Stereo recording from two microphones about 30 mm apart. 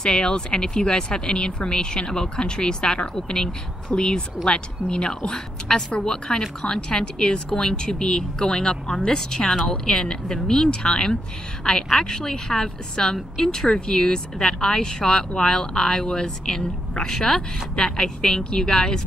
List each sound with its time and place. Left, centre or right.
0.0 s speech: left